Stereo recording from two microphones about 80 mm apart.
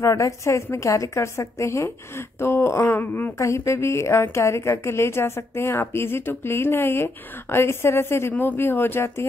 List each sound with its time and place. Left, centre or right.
0.0 s a woman's voice: left
3.3 s a woman's voice: left